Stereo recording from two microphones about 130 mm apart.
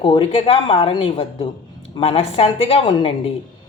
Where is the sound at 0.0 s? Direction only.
40° left (ahead or behind).